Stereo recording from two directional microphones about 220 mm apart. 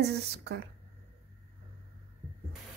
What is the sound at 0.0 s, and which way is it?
Speech, 50° right (ahead or behind).